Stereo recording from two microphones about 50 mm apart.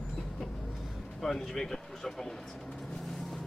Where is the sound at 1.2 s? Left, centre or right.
Centre.